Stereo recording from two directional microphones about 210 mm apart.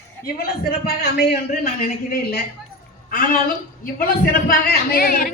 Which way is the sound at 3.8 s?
45° left (ahead or behind).